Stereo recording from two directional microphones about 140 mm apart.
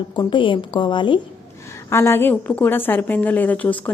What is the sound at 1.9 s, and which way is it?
A woman's voice, 15° left (ahead or behind).